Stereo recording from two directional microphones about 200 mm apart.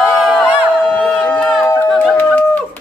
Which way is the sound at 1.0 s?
5° left (ahead or behind).